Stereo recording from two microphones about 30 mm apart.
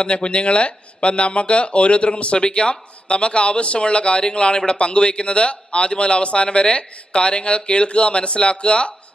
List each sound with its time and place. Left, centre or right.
0.0 s speech: left